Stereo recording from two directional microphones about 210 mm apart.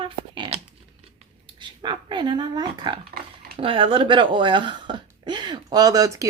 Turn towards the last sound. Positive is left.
turn(degrees=-15)  # may be behind; listen again after turning